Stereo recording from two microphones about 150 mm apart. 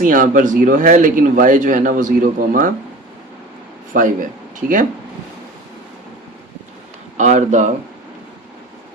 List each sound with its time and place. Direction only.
0.0 s speech: 65° right (ahead or behind)
3.9 s speech: 60° right (ahead or behind)
4.6 s speech: 80° right
7.2 s speech: 55° right (ahead or behind)